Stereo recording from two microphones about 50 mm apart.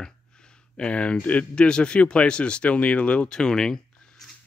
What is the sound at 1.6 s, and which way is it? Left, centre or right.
Speech, centre.